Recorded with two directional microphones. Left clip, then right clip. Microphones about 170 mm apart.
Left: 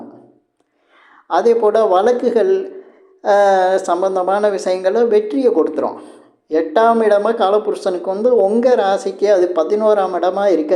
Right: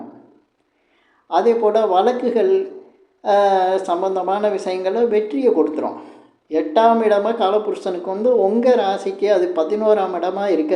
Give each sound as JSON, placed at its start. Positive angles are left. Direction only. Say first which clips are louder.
{"t": 1.3, "sound": "speech", "louder": "left 2 dB", "side_deg": 15}